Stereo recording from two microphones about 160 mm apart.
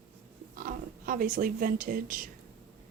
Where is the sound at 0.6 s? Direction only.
60° right (ahead or behind).